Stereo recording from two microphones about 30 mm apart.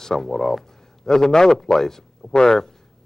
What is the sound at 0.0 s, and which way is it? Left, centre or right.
A man's voice, centre.